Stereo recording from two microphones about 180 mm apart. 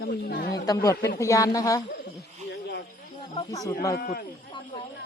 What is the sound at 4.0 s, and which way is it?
Speech, 55° left (ahead or behind).